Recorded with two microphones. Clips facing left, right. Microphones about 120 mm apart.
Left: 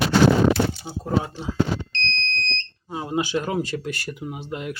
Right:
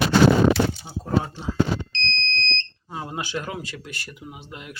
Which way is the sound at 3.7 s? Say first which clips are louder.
Left 9 dB; 45° left (ahead or behind).